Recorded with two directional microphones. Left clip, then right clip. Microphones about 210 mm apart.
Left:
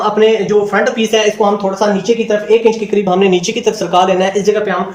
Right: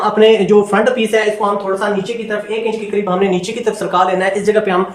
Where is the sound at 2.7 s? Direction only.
15° left (ahead or behind).